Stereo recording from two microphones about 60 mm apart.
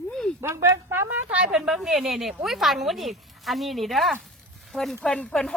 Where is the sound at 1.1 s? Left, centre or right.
Right.